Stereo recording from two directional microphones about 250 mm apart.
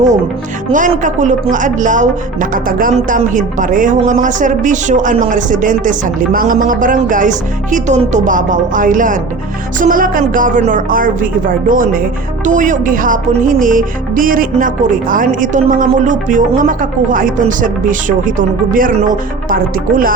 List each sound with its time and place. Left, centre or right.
0.7 s speech: right